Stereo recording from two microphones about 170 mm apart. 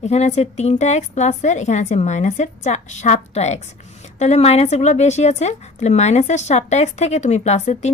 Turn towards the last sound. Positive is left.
turn(degrees=40)  # may be behind; listen again after turning